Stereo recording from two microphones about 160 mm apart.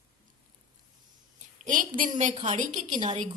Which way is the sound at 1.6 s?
55° right (ahead or behind).